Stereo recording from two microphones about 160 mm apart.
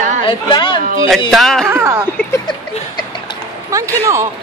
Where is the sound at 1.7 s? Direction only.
15° right (ahead or behind).